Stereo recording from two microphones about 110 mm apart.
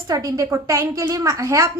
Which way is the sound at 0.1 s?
30° right (ahead or behind).